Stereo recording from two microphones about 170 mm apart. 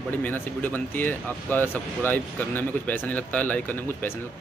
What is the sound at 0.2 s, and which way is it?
Speech, 10° left (ahead or behind).